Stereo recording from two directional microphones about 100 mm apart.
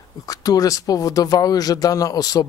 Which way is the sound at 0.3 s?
40° left (ahead or behind).